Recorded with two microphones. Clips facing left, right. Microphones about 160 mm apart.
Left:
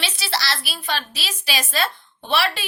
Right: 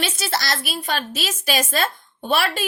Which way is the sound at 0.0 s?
45° right (ahead or behind).